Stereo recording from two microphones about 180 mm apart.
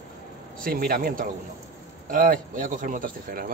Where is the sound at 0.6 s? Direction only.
55° right (ahead or behind).